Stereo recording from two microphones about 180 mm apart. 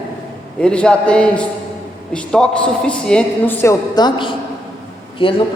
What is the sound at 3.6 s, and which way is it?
A woman's voice, 25° left (ahead or behind).